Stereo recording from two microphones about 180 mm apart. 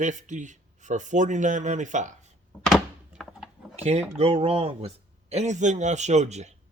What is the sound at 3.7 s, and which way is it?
Speech, 35° right (ahead or behind).